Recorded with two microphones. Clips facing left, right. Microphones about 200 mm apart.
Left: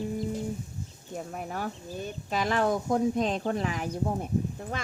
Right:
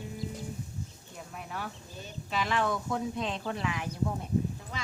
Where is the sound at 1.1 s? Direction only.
45° left (ahead or behind).